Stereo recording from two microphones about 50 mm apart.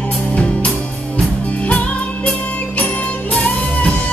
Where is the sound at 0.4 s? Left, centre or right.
Left.